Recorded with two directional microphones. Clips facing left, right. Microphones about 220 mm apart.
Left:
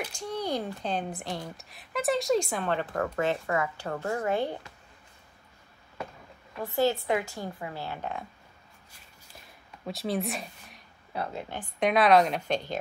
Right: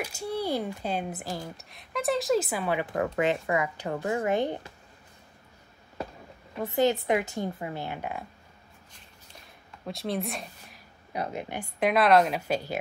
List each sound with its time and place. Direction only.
0.0 s speech: 10° right (ahead or behind)
6.6 s speech: 20° right (ahead or behind)
9.8 s speech: centre (ahead or behind)
11.1 s speech: 15° right (ahead or behind)
11.8 s a woman's voice: centre (ahead or behind)